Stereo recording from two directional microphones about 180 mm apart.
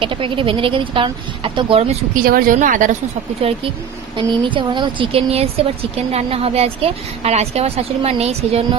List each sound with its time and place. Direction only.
0.0 s speech: 30° right (ahead or behind)
2.2 s a woman's voice: 55° right (ahead or behind)
3.4 s a woman's voice: 35° right (ahead or behind)